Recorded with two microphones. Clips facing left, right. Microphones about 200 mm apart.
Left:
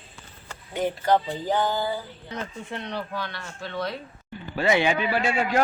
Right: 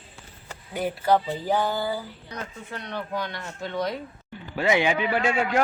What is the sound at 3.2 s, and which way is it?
Speech, 20° right (ahead or behind).